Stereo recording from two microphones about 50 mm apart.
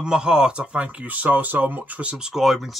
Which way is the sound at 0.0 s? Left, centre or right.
Centre.